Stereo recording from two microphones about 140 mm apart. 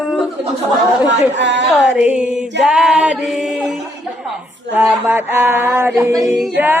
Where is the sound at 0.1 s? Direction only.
Centre (ahead or behind).